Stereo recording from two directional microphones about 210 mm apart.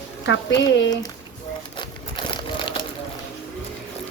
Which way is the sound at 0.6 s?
60° left (ahead or behind).